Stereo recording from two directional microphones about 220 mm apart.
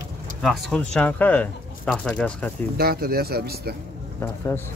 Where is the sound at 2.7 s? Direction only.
45° right (ahead or behind).